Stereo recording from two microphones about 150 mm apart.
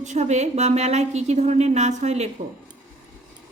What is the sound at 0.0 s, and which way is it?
A woman's voice, 50° right (ahead or behind).